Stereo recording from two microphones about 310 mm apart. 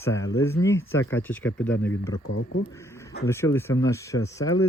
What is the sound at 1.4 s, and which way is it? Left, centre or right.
Speech, left.